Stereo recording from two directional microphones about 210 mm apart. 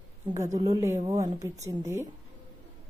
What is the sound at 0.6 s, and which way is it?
A woman's voice, 15° right (ahead or behind).